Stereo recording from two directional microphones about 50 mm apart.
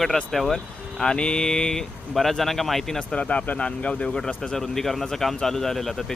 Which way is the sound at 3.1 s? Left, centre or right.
Left.